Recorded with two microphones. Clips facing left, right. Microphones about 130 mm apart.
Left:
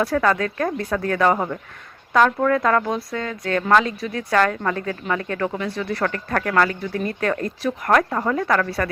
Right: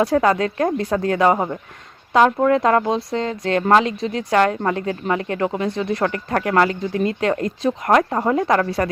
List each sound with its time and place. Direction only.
0.0 s speech: 25° right (ahead or behind)